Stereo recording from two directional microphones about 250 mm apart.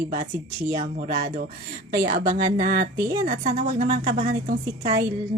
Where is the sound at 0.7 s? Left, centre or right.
Right.